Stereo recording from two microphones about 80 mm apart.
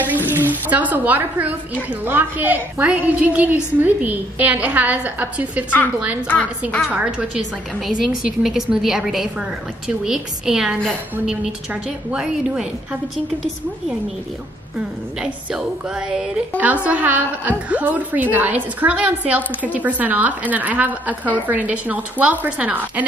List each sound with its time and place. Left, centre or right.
0.0 s a woman's voice: right
6.9 s a woman's voice: centre
7.8 s a woman's voice: centre
16.1 s a woman's voice: centre